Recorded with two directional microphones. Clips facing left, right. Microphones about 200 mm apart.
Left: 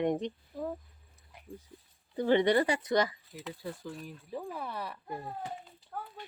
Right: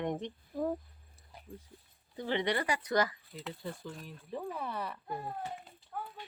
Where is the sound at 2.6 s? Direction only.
25° left (ahead or behind).